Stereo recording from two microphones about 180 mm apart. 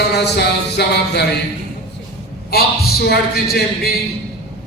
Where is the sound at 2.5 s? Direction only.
60° left (ahead or behind).